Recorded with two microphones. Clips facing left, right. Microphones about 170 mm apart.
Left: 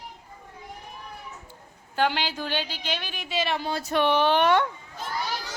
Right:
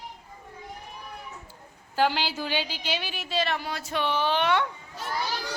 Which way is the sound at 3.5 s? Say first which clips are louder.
Left 3 dB; 25° left (ahead or behind).